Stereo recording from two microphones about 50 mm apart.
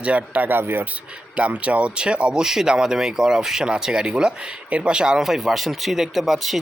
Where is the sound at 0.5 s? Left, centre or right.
Right.